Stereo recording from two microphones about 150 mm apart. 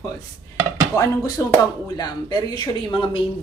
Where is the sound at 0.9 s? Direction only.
20° left (ahead or behind).